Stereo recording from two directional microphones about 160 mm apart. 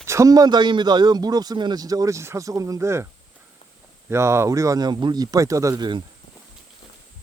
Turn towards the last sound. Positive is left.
turn(degrees=-25)  # may be behind; listen again after turning